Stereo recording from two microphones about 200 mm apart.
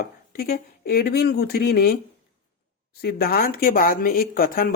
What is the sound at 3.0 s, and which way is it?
Speech, 50° left (ahead or behind).